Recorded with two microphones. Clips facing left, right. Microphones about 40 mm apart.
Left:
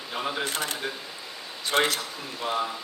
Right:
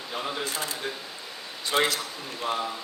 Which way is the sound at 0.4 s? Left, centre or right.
Left.